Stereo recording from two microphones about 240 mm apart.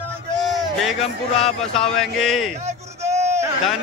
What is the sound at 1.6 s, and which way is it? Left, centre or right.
Speech, centre.